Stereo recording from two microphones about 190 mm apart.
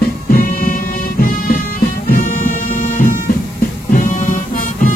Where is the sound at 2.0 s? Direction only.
50° left (ahead or behind).